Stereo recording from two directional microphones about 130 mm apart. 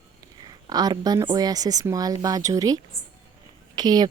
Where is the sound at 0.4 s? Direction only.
30° right (ahead or behind).